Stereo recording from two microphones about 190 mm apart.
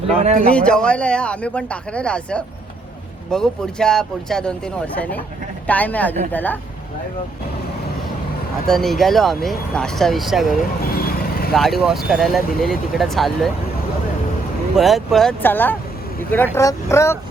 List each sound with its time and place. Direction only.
0.2 s speech: 35° right (ahead or behind)
0.4 s speech: 5° left (ahead or behind)
8.6 s speech: centre (ahead or behind)
10.6 s vehicle: 50° left (ahead or behind)
11.5 s speech: centre (ahead or behind)
14.8 s speech: centre (ahead or behind)